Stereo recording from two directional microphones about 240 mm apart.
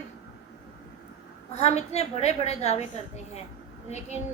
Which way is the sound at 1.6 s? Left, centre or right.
Left.